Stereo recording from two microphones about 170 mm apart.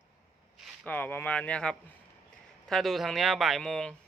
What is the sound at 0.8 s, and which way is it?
Speech, 10° left (ahead or behind).